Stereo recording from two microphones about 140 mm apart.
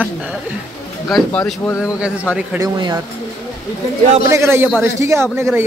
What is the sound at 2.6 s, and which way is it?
Speech, 30° right (ahead or behind).